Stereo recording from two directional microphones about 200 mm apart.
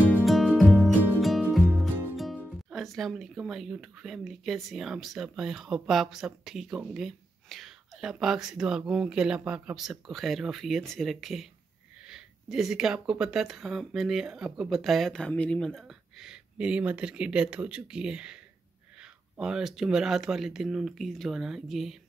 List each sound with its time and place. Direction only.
0.0 s music: 5° left (ahead or behind)
12.1 s speech: centre (ahead or behind)